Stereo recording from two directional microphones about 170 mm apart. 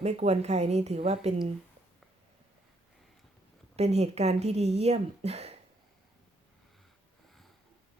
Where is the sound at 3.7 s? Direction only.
40° right (ahead or behind).